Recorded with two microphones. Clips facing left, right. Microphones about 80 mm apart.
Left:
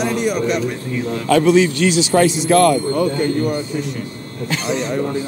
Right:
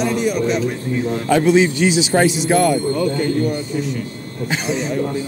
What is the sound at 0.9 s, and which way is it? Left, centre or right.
A man's voice, right.